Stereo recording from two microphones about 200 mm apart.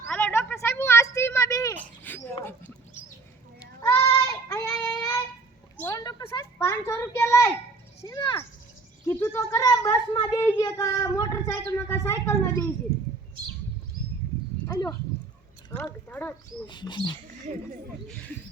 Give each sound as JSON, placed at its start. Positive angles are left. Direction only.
{"t": 0.0, "sound": "a sound", "side_deg": 10}
{"t": 3.8, "sound": "child singing", "side_deg": 15}
{"t": 5.8, "sound": "a sound", "side_deg": 15}
{"t": 6.6, "sound": "speech", "side_deg": 10}
{"t": 14.7, "sound": "clip-clop", "side_deg": 20}
{"t": 15.8, "sound": "speech", "side_deg": 10}
{"t": 16.6, "sound": "speech", "side_deg": 20}